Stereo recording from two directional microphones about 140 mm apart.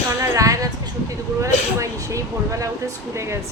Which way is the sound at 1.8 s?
20° right (ahead or behind).